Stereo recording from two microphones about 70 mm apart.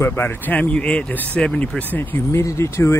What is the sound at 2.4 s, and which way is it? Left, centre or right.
Speech, left.